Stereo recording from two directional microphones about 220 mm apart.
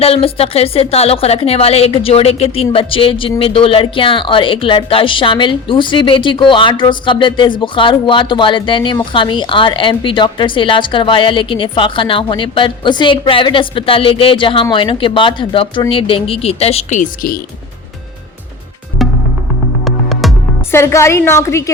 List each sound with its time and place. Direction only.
0.0 s speech: 25° left (ahead or behind)
19.8 s music: centre (ahead or behind)
20.7 s a woman's voice: 10° left (ahead or behind)